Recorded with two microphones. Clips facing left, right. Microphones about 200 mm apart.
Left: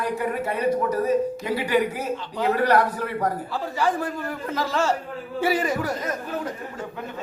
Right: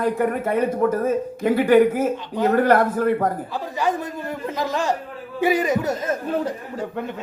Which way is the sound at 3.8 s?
20° right (ahead or behind).